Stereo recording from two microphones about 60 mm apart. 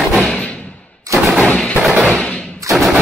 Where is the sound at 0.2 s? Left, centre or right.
Left.